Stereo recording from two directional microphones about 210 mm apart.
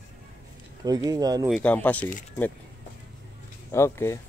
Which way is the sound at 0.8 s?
20° right (ahead or behind).